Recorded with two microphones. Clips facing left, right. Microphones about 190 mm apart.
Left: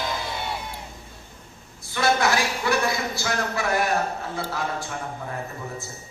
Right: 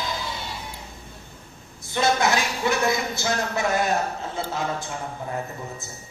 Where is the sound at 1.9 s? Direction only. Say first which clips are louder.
Even; 20° right (ahead or behind).